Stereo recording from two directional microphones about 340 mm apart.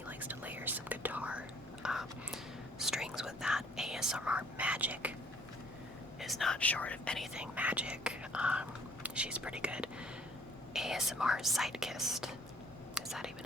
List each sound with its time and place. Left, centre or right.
0.1 s whispering: centre
6.1 s whispering: centre
9.0 s speech: centre
12.9 s whispering: centre